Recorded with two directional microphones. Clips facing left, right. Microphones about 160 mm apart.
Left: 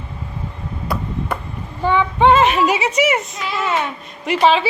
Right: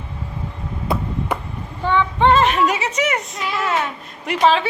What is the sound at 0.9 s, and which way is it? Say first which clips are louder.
Chop: right 2 dB; 20° right (ahead or behind).